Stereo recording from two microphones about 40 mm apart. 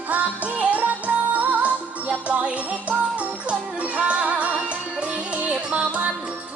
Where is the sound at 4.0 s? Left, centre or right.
Right.